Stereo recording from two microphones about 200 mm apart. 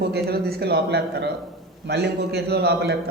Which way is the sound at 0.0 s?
55° right (ahead or behind).